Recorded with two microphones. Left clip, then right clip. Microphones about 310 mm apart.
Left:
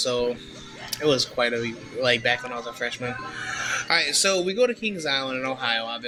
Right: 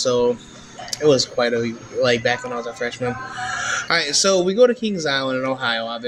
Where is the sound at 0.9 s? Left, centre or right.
Left.